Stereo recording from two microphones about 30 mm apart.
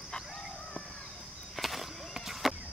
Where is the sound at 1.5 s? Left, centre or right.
Centre.